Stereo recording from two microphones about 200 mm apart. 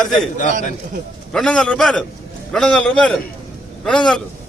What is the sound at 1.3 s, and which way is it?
A man's voice, 5° left (ahead or behind).